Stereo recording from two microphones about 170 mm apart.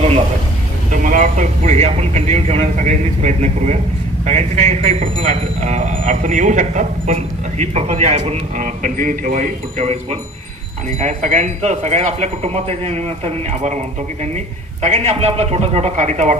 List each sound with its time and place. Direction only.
0.9 s speech: 50° right (ahead or behind)